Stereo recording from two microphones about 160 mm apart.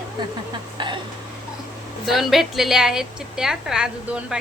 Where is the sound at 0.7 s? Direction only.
30° right (ahead or behind).